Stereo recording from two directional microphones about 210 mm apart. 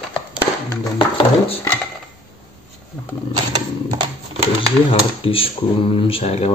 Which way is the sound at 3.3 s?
25° right (ahead or behind).